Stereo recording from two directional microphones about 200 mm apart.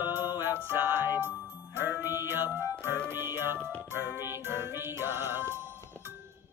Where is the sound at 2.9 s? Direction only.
10° right (ahead or behind).